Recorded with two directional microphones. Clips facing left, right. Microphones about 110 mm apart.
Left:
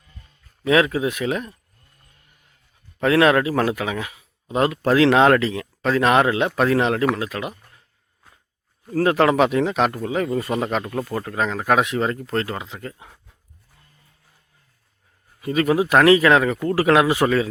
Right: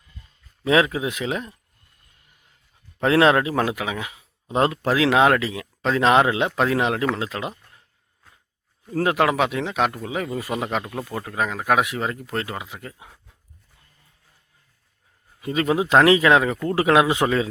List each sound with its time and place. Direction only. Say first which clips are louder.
0.6 s a man's voice: left 1 dB; 20° right (ahead or behind)
3.0 s a man's voice: left 1 dB; 25° right (ahead or behind)
4.8 s a man's voice: left 5 dB; 10° right (ahead or behind)
9.0 s speech: left 3 dB; 15° right (ahead or behind)
15.4 s a man's voice: left 2 dB; 20° right (ahead or behind)